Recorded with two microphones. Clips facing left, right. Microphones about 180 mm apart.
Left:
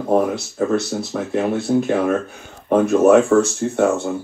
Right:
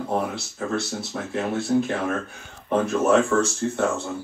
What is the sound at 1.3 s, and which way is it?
Speech, 55° left (ahead or behind).